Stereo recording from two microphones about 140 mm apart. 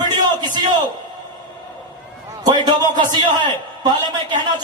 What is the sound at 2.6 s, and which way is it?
Speech, 30° right (ahead or behind).